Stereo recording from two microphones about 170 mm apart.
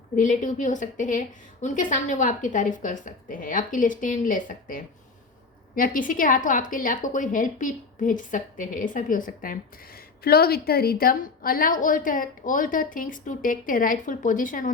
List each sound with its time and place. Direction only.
0.2 s a woman's voice: 50° left (ahead or behind)
10.2 s a woman's voice: 65° left (ahead or behind)